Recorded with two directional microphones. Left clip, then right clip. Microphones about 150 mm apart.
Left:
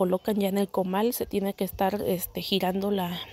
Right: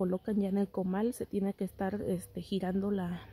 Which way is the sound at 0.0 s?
5° left (ahead or behind).